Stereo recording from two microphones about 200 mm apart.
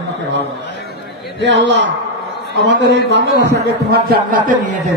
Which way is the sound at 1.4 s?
65° right (ahead or behind).